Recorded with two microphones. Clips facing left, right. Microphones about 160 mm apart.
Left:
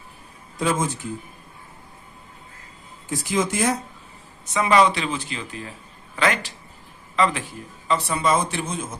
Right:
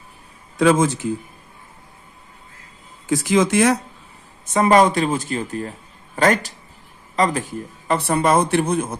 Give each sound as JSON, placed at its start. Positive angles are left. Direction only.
{"t": 0.6, "sound": "speech", "side_deg": -80}
{"t": 3.1, "sound": "speech", "side_deg": -80}
{"t": 4.4, "sound": "a man's voice", "side_deg": -45}